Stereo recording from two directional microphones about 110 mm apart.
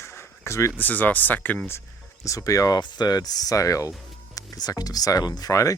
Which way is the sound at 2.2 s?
30° left (ahead or behind).